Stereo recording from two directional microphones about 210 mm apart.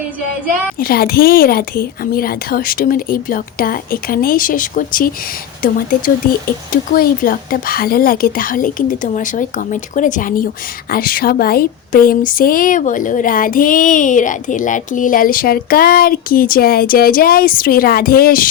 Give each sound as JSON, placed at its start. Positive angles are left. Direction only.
{"t": 0.8, "sound": "a woman's voice", "side_deg": 45}
{"t": 6.9, "sound": "a woman's voice", "side_deg": 45}